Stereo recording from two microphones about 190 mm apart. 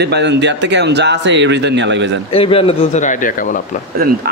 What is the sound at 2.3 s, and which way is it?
Speech, 30° left (ahead or behind).